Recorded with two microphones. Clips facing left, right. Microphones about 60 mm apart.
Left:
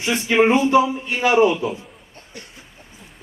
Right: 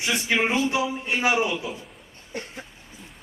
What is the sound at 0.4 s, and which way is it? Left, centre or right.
A man's voice, left.